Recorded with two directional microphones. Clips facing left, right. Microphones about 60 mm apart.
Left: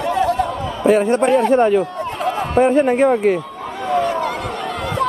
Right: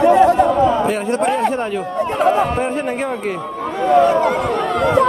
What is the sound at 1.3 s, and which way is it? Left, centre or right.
A man's voice, centre.